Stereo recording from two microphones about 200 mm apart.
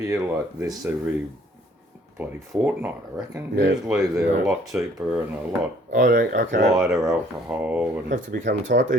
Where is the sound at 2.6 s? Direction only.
10° right (ahead or behind).